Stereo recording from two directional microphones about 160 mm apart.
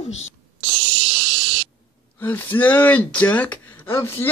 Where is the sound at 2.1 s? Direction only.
10° left (ahead or behind).